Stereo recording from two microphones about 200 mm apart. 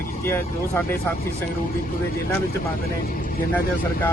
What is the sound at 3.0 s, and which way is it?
Speech, 45° left (ahead or behind).